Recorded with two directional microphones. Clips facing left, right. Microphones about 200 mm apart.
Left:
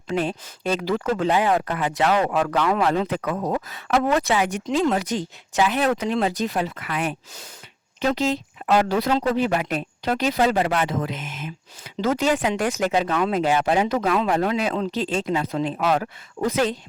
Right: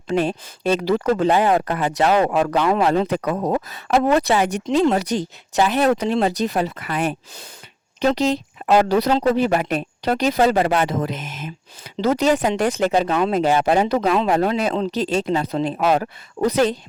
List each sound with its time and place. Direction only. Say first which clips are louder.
0.1 s speech: right 4 dB; 40° right (ahead or behind)
13.3 s speech: right 3 dB; 35° right (ahead or behind)